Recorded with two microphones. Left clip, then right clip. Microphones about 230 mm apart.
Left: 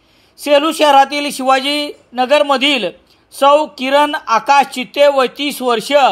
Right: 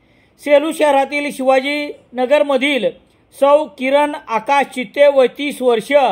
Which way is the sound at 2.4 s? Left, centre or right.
Centre.